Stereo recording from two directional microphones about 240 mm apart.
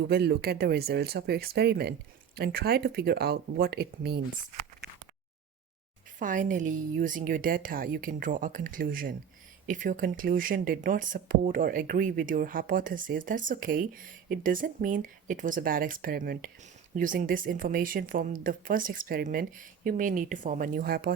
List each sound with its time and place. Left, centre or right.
0.1 s speech: right
6.1 s speech: right